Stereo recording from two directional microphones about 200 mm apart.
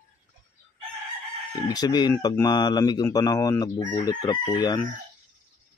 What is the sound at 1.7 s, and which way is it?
Speech, 20° left (ahead or behind).